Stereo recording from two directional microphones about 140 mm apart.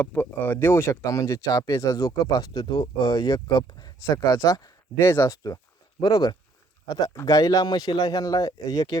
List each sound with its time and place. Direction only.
0.0 s speech: 15° left (ahead or behind)